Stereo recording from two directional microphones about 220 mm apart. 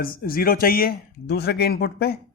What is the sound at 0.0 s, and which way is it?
Speech, 40° left (ahead or behind).